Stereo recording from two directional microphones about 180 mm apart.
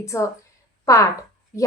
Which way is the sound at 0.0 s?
15° left (ahead or behind).